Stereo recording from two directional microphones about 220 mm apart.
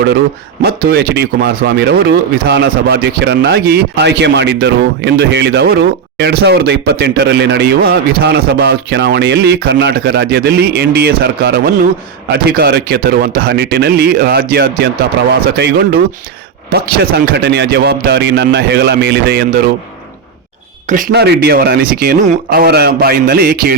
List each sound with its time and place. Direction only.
0.6 s speech: 45° right (ahead or behind)
20.9 s speech: 45° right (ahead or behind)